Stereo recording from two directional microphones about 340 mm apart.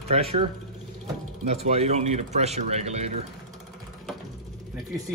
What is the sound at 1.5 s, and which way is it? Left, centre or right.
Speech, centre.